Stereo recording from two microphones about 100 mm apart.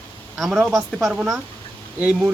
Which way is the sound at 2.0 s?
10° right (ahead or behind).